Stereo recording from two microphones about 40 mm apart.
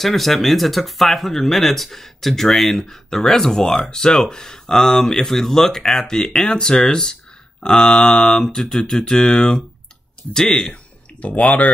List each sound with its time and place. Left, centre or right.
0.0 s speech: centre; by 10.8 s left
11.1 s speech: left